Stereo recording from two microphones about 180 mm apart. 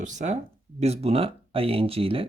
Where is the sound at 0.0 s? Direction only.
40° right (ahead or behind).